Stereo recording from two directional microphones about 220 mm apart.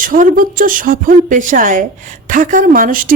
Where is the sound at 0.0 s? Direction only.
40° right (ahead or behind).